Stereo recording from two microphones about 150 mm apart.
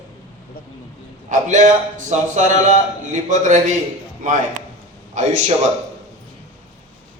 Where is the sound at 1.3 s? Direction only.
55° right (ahead or behind).